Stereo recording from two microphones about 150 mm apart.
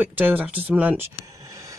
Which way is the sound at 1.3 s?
20° right (ahead or behind).